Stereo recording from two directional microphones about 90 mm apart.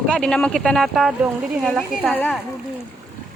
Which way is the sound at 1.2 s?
10° right (ahead or behind).